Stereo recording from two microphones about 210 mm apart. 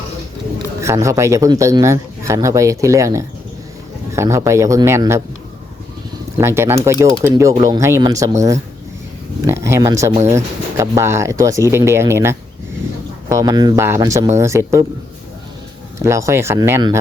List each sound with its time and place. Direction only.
0.8 s speech: 15° right (ahead or behind)
6.4 s speech: 10° right (ahead or behind)
16.0 s speech: 15° right (ahead or behind)